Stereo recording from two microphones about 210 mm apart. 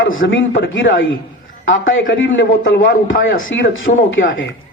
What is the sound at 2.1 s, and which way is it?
A man's voice, 65° left (ahead or behind).